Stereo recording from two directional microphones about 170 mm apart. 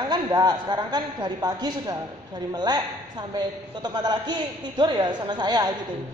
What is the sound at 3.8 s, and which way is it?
Speech, 25° right (ahead or behind).